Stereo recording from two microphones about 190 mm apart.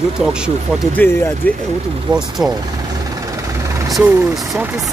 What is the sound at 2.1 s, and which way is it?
Speech, 25° right (ahead or behind).